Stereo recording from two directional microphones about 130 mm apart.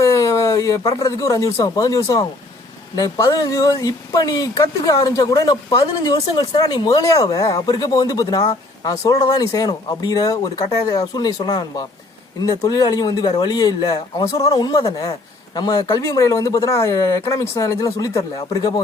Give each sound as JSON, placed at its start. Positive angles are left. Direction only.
{"t": 0.0, "sound": "speech", "side_deg": 25}